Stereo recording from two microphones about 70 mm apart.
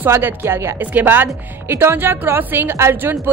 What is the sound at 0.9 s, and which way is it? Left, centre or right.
A woman's voice, right.